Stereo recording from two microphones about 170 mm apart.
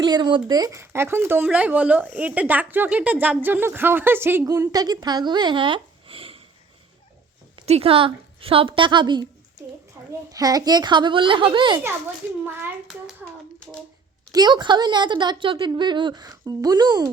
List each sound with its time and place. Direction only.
0.0 s speech: 25° right (ahead or behind)
7.5 s a woman's voice: 35° right (ahead or behind)
12.5 s a child's voice: 10° right (ahead or behind)
14.3 s a woman's voice: 25° right (ahead or behind)